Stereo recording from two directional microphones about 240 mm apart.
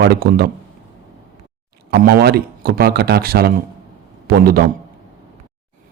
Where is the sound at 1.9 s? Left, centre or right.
Right.